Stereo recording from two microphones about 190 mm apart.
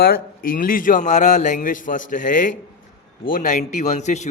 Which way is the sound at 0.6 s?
45° left (ahead or behind).